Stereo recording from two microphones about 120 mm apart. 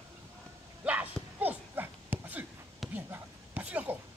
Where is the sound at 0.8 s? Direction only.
15° right (ahead or behind).